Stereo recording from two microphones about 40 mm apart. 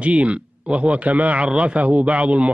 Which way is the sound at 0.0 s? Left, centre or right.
Right.